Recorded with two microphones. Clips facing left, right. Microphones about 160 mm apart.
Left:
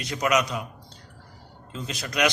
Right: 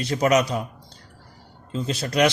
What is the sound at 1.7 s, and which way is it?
Speech, 35° right (ahead or behind).